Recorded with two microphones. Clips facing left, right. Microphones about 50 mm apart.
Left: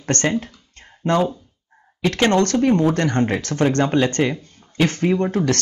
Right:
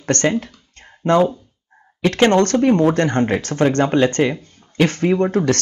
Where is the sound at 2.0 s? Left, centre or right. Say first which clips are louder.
Right 3 dB; right.